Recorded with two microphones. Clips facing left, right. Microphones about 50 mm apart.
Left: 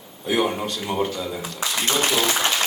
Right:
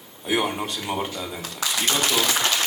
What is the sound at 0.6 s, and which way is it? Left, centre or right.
Speech, centre.